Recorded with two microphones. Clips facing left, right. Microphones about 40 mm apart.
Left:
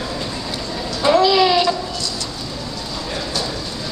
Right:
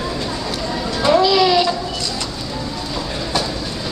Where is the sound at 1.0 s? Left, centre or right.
Centre.